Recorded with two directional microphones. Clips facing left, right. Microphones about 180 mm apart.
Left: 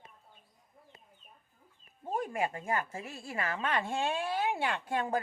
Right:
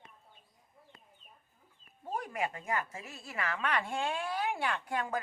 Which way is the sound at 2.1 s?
25° left (ahead or behind).